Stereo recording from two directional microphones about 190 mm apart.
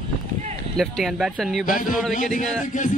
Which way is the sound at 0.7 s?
Centre (ahead or behind).